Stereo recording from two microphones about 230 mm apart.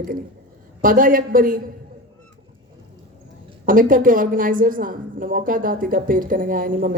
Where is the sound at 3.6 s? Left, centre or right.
Right.